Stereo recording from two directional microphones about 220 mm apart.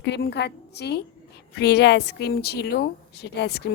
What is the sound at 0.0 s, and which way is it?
A woman's voice, 50° left (ahead or behind).